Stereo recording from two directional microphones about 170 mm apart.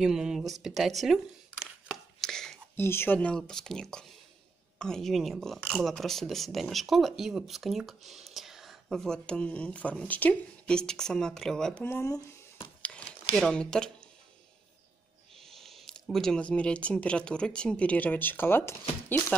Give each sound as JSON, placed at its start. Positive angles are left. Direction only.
{"t": 0.0, "sound": "a sound", "side_deg": -5}
{"t": 2.8, "sound": "speech", "side_deg": 15}
{"t": 12.8, "sound": "crumpling", "side_deg": 5}
{"t": 15.4, "sound": "speech", "side_deg": 0}